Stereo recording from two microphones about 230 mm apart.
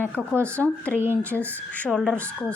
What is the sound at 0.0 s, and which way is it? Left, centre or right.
Speech, centre.